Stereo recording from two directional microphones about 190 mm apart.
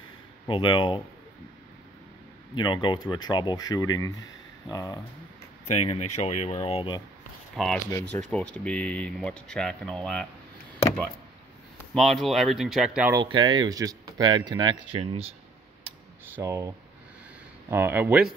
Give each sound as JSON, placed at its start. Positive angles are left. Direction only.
{"t": 0.5, "sound": "speech", "side_deg": 25}
{"t": 2.5, "sound": "speech", "side_deg": 25}
{"t": 5.9, "sound": "speech", "side_deg": 35}
{"t": 7.5, "sound": "speech", "side_deg": 0}
{"t": 11.8, "sound": "speech", "side_deg": 0}
{"t": 13.1, "sound": "speech", "side_deg": -25}
{"t": 16.3, "sound": "speech", "side_deg": -15}